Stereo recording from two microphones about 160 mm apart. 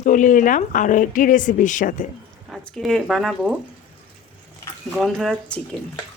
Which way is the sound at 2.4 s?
Centre (ahead or behind).